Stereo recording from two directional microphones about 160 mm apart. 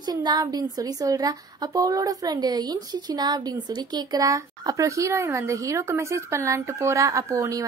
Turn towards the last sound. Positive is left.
turn(degrees=-20)  # may be behind; listen again after turning